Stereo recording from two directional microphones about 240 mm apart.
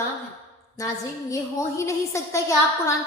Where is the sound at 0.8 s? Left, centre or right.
Centre.